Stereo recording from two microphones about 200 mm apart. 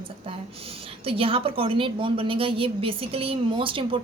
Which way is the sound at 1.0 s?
25° right (ahead or behind).